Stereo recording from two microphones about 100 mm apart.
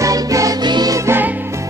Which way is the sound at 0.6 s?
45° right (ahead or behind).